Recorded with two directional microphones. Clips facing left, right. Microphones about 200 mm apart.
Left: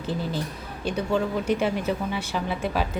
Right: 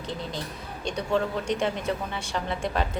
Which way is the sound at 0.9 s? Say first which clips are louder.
Left 2 dB; 5° left (ahead or behind).